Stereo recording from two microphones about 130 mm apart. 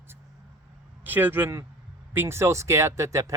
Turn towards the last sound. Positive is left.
turn(degrees=-25)  # may be behind; listen again after turning